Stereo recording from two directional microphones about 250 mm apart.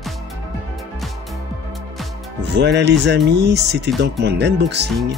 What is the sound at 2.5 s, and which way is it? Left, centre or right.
Speech, right.